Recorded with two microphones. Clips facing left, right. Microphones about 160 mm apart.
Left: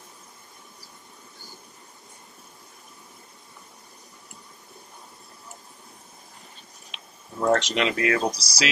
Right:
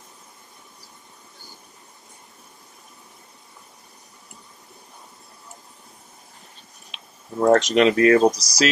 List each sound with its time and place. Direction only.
7.3 s speech: 40° right (ahead or behind)